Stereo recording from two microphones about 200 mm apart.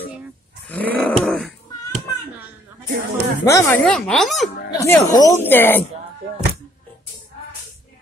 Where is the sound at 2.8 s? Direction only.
40° right (ahead or behind).